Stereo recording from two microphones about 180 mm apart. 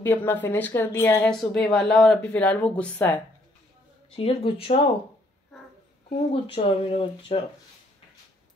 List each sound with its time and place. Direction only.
0.0 s speech: 10° left (ahead or behind)
4.1 s speech: 30° left (ahead or behind)
6.4 s speech: 30° left (ahead or behind)